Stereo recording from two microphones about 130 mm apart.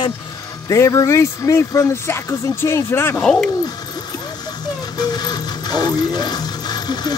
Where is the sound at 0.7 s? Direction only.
25° left (ahead or behind).